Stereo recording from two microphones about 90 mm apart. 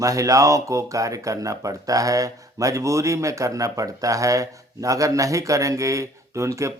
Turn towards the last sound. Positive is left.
turn(degrees=-35)  # may be behind; listen again after turning